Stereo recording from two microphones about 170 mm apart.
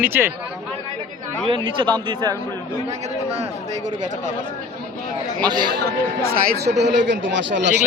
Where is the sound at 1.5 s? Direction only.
30° right (ahead or behind).